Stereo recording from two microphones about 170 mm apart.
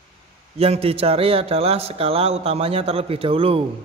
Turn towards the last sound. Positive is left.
turn(degrees=-35)  # may be behind; listen again after turning